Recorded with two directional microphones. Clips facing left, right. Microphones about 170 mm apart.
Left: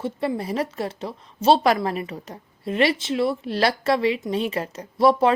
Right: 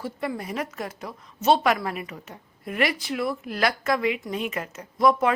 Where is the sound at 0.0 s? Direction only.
30° left (ahead or behind).